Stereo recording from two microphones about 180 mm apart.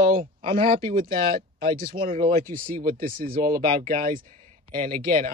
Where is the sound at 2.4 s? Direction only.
50° right (ahead or behind).